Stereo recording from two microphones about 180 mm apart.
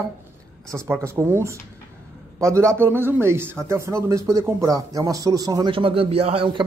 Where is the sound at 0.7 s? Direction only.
15° right (ahead or behind).